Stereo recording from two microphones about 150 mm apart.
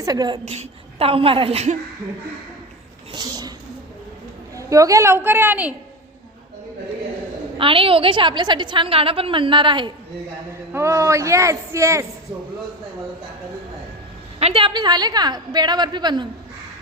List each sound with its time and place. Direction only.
0.0 s a woman's voice: 25° right (ahead or behind)
0.4 s a woman's voice: 45° right (ahead or behind)
3.1 s a sound: 30° right (ahead or behind)
4.5 s a woman's voice: 20° right (ahead or behind)
7.6 s a woman's voice: 35° right (ahead or behind)
10.7 s a woman's voice: 20° right (ahead or behind)
14.3 s a woman's voice: 40° right (ahead or behind)